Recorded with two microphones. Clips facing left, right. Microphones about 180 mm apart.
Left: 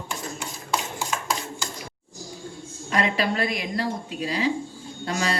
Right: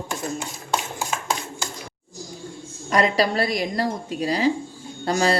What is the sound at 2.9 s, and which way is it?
A woman's voice, 40° right (ahead or behind).